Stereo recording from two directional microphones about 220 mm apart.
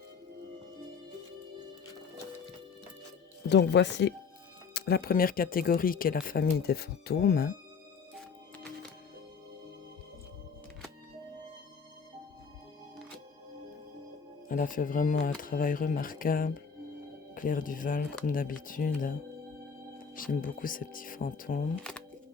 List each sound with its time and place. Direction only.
3.5 s speech: 50° left (ahead or behind)
14.4 s speech: 40° left (ahead or behind)
20.1 s speech: 40° left (ahead or behind)